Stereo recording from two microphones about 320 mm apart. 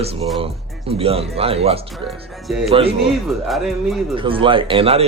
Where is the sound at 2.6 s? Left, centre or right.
Centre.